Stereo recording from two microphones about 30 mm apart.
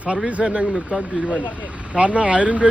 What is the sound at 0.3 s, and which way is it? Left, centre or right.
Speech, right.